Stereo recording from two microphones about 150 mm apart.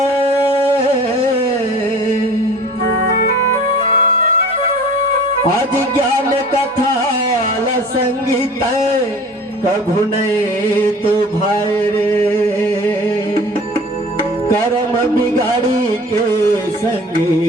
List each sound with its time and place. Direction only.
3.8 s music: 40° left (ahead or behind)